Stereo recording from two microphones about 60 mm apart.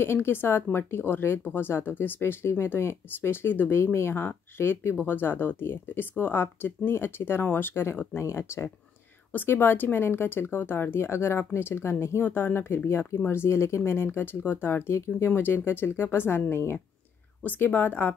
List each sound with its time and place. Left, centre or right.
0.0 s speech: left
9.3 s speech: left
17.4 s speech: left